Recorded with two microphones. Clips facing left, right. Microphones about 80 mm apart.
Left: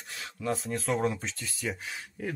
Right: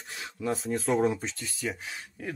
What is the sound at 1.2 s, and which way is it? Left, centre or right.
Speech, centre.